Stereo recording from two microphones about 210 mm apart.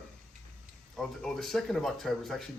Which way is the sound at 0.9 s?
Centre (ahead or behind).